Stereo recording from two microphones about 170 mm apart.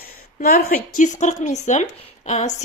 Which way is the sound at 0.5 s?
55° left (ahead or behind).